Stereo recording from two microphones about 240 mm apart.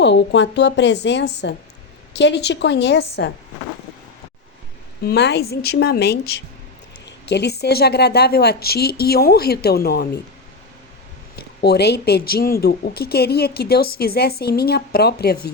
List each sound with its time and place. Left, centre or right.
0.0 s speech: left
5.0 s speech: left
11.3 s speech: left